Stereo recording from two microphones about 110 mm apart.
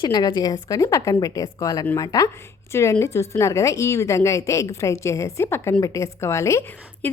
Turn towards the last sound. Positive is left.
turn(degrees=25)  # may be behind; listen again after turning